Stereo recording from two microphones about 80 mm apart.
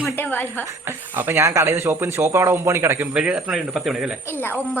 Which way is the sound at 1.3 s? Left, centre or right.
Right.